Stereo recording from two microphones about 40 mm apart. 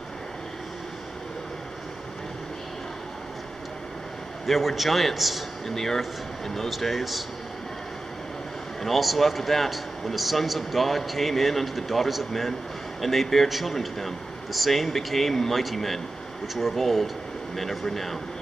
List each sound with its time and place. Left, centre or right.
4.5 s a man's voice: centre
8.8 s a man's voice: centre